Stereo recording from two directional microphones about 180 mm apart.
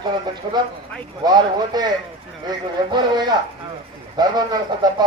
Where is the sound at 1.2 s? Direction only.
25° right (ahead or behind).